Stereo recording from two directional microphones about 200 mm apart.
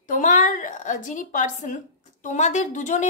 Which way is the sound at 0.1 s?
40° left (ahead or behind).